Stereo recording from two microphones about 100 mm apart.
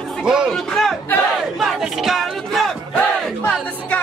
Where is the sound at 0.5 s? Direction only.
5° left (ahead or behind).